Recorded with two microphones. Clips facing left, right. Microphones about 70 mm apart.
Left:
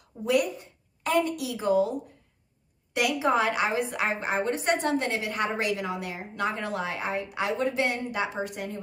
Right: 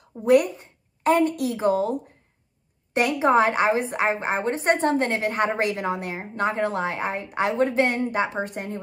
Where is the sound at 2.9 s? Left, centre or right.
Right.